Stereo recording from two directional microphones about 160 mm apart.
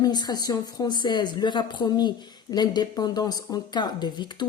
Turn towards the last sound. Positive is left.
turn(degrees=25)  # may be behind; listen again after turning